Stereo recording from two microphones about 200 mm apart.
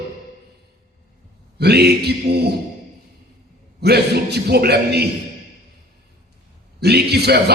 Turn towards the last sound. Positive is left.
turn(degrees=-55)  # may be behind; listen again after turning